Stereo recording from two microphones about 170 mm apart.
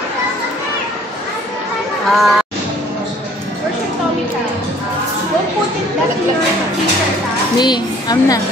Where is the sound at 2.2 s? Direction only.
Centre (ahead or behind).